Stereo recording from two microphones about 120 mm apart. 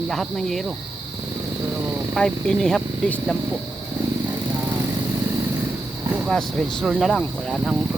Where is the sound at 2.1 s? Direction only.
5° left (ahead or behind).